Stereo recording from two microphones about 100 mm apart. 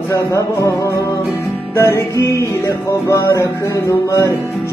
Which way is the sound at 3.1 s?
30° left (ahead or behind).